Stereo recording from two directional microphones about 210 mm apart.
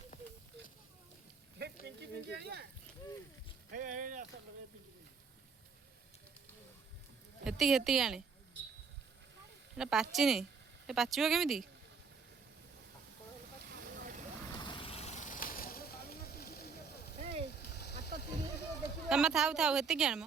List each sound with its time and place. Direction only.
1.5 s speech: 50° right (ahead or behind)
3.7 s speech: 40° right (ahead or behind)
7.4 s a woman's voice: centre (ahead or behind)
9.7 s a woman's voice: 5° right (ahead or behind)
13.7 s vehicle: 45° right (ahead or behind)
14.6 s vehicle: 25° left (ahead or behind); by 16.7 s 45° left (ahead or behind)
17.5 s a sound: 50° left (ahead or behind)
19.0 s a woman's voice: 5° right (ahead or behind)